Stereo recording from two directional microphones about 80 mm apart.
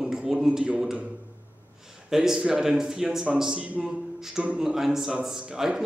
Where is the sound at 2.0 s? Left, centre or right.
Centre.